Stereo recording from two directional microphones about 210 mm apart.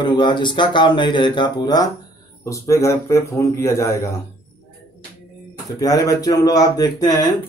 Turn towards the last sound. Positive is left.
turn(degrees=20)  # may be behind; listen again after turning